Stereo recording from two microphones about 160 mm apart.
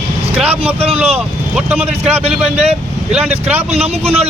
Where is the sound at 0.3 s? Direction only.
10° right (ahead or behind).